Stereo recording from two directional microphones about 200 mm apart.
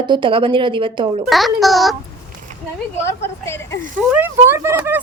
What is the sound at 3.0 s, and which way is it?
Speech, 10° left (ahead or behind).